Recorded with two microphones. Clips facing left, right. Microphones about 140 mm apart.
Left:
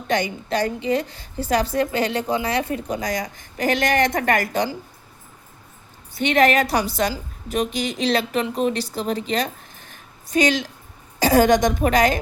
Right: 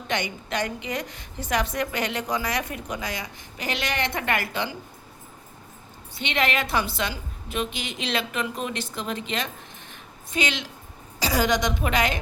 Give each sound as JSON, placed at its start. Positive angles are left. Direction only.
{"t": 0.1, "sound": "a woman's voice", "side_deg": 35}
{"t": 6.1, "sound": "a woman's voice", "side_deg": 45}